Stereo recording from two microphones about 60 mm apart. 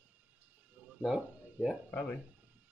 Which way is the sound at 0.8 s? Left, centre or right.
Right.